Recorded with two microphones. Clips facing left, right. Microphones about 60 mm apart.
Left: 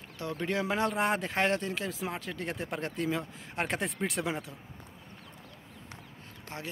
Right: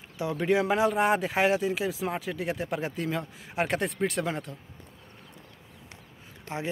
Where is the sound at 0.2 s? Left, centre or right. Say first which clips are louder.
Right 7 dB; centre.